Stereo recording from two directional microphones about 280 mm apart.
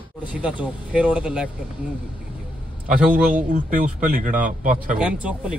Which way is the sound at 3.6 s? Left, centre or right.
Right.